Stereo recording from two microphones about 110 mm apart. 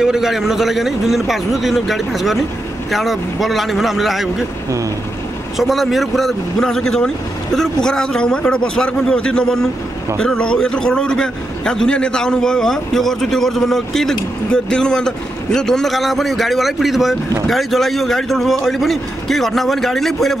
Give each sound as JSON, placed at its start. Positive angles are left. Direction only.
{"t": 0.0, "sound": "a man's voice", "side_deg": -5}
{"t": 5.6, "sound": "a man's voice", "side_deg": 0}